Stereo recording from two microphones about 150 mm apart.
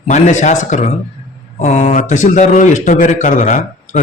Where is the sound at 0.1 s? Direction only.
50° left (ahead or behind).